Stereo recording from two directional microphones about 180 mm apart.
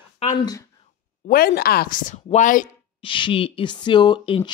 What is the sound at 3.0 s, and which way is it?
Speech, 30° left (ahead or behind).